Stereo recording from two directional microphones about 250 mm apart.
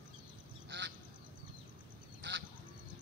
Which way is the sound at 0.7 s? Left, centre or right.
Right.